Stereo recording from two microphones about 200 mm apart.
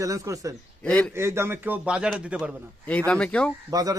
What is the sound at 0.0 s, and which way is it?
Speech, 15° right (ahead or behind).